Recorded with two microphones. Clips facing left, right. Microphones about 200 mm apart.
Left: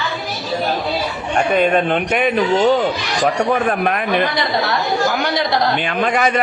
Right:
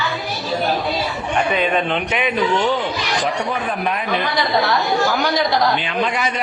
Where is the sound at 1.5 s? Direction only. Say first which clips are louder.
Left 6 dB; 50° left (ahead or behind).